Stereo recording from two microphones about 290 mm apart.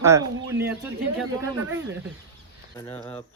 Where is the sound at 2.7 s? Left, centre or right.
Centre.